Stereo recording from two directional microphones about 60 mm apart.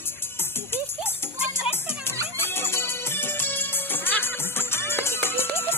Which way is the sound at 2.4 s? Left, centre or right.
Left.